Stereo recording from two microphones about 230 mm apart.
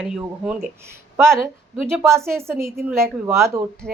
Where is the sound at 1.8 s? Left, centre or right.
Centre.